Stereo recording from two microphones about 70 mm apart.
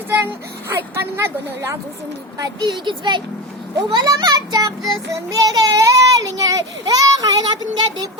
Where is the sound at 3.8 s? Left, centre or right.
Right.